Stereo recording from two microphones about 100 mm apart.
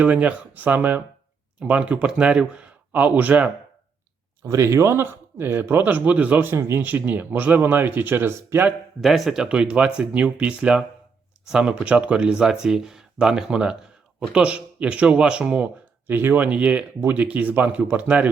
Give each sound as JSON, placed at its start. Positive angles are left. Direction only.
{"t": 0.0, "sound": "speech", "side_deg": -15}
{"t": 4.4, "sound": "speech", "side_deg": -30}
{"t": 9.0, "sound": "speech", "side_deg": 0}